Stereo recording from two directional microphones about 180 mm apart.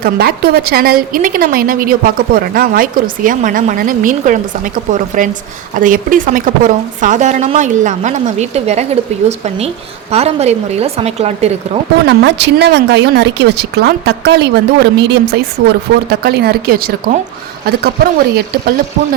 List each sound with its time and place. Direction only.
0.0 s a woman's voice: 55° right (ahead or behind); by 9.0 s 35° right (ahead or behind)
10.1 s speech: 35° right (ahead or behind)
12.0 s speech: 75° right (ahead or behind); by 18.7 s 55° right (ahead or behind)